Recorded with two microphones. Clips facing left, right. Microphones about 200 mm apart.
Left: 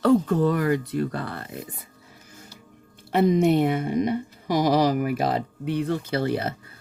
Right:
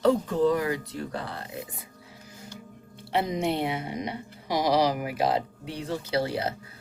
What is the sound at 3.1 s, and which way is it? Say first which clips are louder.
Speech: left 8 dB; 50° left (ahead or behind).